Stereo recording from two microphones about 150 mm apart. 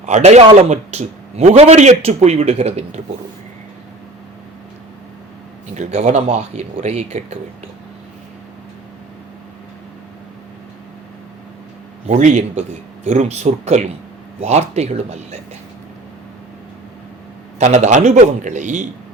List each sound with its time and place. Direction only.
0.0 s a man's voice: 50° right (ahead or behind)
5.7 s a man's voice: 50° right (ahead or behind)
12.0 s a man's voice: 50° right (ahead or behind)
17.6 s a man's voice: 50° right (ahead or behind)